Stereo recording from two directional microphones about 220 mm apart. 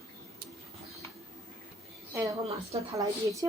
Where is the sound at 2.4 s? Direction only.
30° right (ahead or behind).